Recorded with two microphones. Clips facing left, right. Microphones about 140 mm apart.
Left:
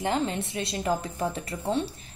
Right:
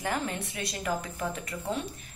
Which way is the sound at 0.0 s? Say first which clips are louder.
Left 5 dB; 25° left (ahead or behind).